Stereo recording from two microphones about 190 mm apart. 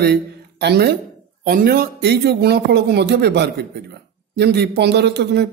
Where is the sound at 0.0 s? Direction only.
60° right (ahead or behind).